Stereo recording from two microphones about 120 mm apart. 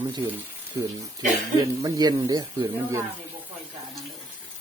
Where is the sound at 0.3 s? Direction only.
15° right (ahead or behind).